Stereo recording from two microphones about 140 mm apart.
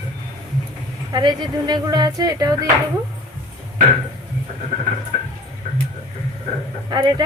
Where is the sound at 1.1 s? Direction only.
30° right (ahead or behind).